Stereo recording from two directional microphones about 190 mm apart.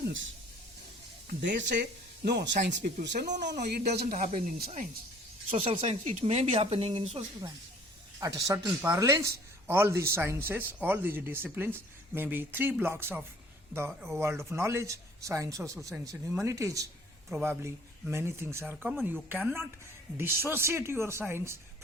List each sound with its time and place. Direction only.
1.3 s speech: 65° right (ahead or behind)
4.1 s speech: 45° right (ahead or behind)
5.7 s speech: 35° right (ahead or behind)
8.2 s a man's voice: 15° right (ahead or behind)